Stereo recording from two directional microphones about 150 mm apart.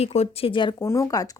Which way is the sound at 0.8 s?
20° left (ahead or behind).